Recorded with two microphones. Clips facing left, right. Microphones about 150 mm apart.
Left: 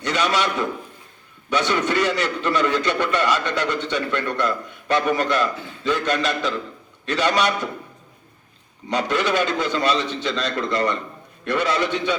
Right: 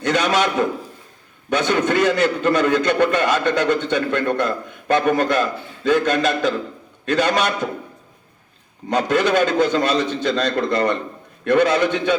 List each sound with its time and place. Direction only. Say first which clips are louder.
0.0 s a man's voice: right 3 dB; 50° right (ahead or behind)
8.9 s a man's voice: right 4 dB; 45° right (ahead or behind)